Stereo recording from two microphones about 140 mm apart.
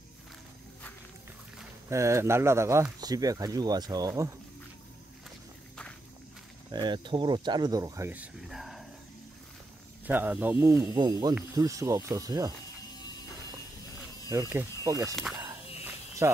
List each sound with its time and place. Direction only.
1.9 s speech: 20° right (ahead or behind)
6.7 s speech: 30° right (ahead or behind)
8.1 s speech: 5° right (ahead or behind)
10.0 s speech: 15° right (ahead or behind)
10.6 s speech: 25° right (ahead or behind)
14.3 s speech: 20° right (ahead or behind)
16.2 s speech: 20° right (ahead or behind)